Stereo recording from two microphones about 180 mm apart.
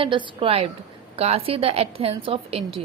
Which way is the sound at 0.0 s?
30° right (ahead or behind).